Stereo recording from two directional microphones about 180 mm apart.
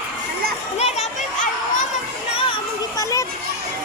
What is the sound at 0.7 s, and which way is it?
Children playing, 35° left (ahead or behind).